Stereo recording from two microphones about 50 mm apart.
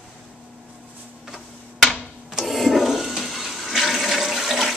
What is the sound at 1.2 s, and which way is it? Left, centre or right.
Tick-tock, centre.